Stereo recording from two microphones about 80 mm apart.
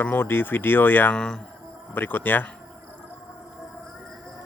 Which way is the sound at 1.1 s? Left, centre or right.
Centre.